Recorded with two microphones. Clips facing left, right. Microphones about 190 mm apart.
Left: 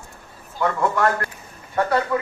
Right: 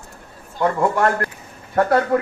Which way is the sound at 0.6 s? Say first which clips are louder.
Right 2 dB; 30° right (ahead or behind).